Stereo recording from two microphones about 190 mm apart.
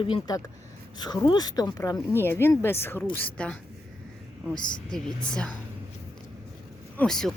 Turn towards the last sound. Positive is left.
turn(degrees=5)  # may be behind; listen again after turning